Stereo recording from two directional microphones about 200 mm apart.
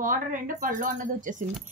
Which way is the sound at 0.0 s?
40° right (ahead or behind).